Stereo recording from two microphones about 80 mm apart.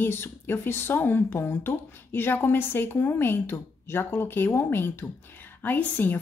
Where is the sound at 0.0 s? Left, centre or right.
Left.